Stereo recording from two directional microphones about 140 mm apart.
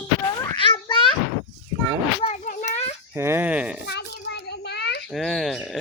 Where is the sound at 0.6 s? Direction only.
40° left (ahead or behind).